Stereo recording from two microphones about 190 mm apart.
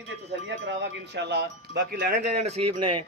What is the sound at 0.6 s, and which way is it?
Speech, 65° right (ahead or behind).